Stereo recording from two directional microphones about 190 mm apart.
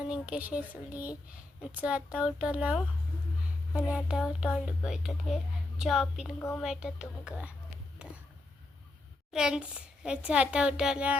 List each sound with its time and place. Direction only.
0.1 s speech: 5° right (ahead or behind)
3.8 s a child's voice: 5° right (ahead or behind)
8.0 s a sound: 5° right (ahead or behind)
9.3 s a child's voice: 5° right (ahead or behind)